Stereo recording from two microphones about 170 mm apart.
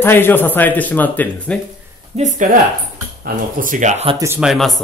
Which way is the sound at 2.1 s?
45° right (ahead or behind).